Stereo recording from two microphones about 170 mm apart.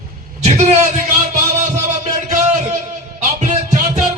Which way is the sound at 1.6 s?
45° right (ahead or behind).